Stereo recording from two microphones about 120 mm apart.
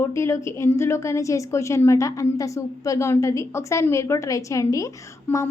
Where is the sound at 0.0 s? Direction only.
20° left (ahead or behind).